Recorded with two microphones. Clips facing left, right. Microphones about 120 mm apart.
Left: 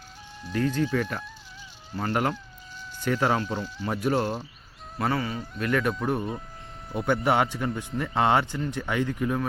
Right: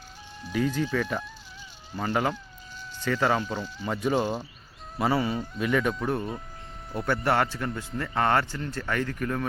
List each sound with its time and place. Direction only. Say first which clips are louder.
0.4 s speech: left 1 dB; 5° right (ahead or behind); by 9.5 s 10° left (ahead or behind)